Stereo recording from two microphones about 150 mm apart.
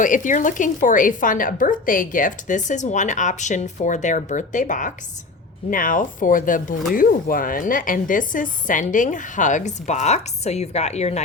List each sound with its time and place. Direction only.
0.0 s speech: 60° left (ahead or behind)